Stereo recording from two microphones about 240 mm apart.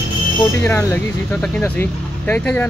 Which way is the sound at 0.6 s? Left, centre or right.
Centre.